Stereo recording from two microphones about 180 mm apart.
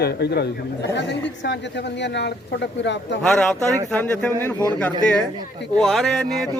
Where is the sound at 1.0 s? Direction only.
80° left.